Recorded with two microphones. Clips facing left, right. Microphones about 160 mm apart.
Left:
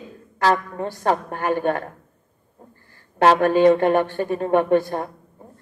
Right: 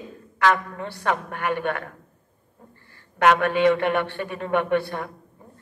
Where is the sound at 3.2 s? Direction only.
35° left (ahead or behind).